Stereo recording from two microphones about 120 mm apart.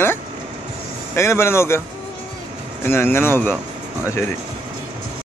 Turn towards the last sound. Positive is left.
turn(degrees=20)  # may be behind; listen again after turning